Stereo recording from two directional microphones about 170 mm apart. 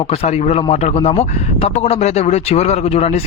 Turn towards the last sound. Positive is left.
turn(degrees=40)  # may be behind; listen again after turning